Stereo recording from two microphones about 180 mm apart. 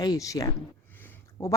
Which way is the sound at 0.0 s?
20° left (ahead or behind).